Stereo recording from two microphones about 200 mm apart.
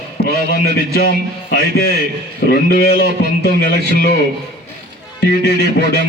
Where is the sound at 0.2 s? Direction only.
50° left (ahead or behind).